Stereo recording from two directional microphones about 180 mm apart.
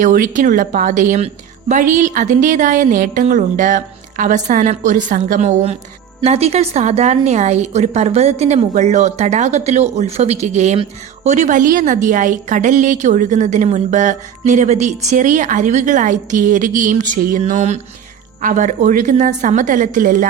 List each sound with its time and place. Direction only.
0.0 s a woman's voice: 45° right (ahead or behind)